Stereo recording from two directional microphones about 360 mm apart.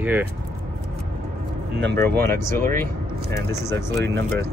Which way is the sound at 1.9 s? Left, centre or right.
Right.